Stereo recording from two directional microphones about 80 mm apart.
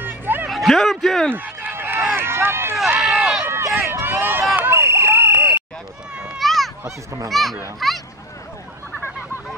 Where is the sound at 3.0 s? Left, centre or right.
Centre.